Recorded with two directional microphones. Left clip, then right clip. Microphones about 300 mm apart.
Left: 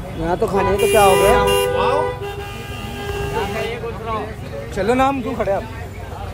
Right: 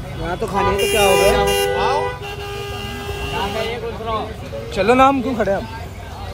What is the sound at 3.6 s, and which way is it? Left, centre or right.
Vehicle, right.